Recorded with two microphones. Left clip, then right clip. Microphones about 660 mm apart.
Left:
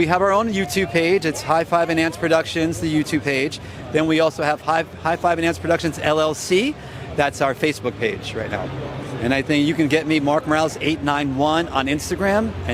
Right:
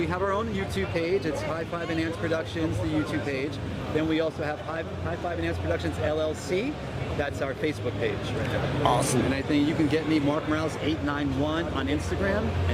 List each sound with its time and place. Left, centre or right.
0.0 s speech: left
9.3 s speech: left